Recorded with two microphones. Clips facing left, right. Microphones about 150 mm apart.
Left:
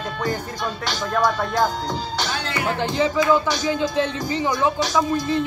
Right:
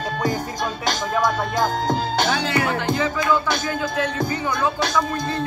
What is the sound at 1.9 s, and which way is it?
Music, 50° right (ahead or behind).